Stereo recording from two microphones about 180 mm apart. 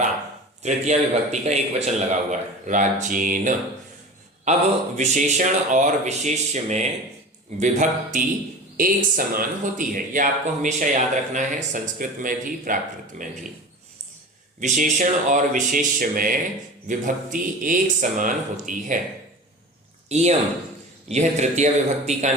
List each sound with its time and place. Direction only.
0.6 s speech: 40° right (ahead or behind)
4.5 s speech: 40° right (ahead or behind)
14.6 s speech: 45° right (ahead or behind)
20.1 s speech: 40° right (ahead or behind)